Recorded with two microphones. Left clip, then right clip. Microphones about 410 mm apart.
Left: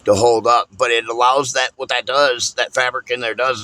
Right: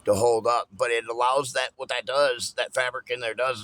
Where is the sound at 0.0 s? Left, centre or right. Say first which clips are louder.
Left 8 dB; right.